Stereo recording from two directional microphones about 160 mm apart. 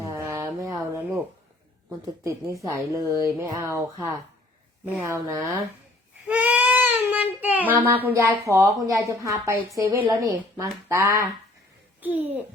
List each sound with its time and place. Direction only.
0.0 s a sound: 15° right (ahead or behind)
2.2 s speech: 20° right (ahead or behind)
6.2 s a child's voice: 10° right (ahead or behind)